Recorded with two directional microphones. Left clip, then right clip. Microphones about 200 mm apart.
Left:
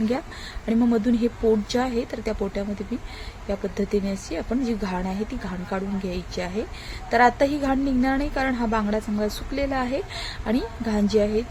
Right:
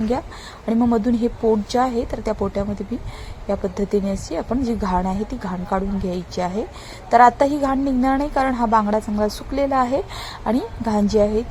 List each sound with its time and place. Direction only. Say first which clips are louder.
0.6 s a woman's voice: right 3 dB; 10° right (ahead or behind)